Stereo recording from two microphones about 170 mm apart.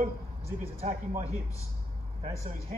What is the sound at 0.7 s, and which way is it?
Speech, 40° right (ahead or behind).